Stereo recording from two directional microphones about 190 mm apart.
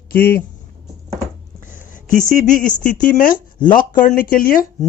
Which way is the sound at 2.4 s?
45° left (ahead or behind).